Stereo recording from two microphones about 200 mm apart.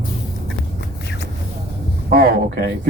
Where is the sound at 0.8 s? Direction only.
55° left (ahead or behind).